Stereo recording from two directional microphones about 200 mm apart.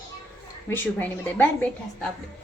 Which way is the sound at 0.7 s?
10° left (ahead or behind).